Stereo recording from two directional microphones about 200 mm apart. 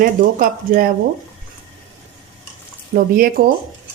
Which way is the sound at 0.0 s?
45° right (ahead or behind).